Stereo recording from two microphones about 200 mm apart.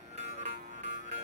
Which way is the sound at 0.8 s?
35° right (ahead or behind).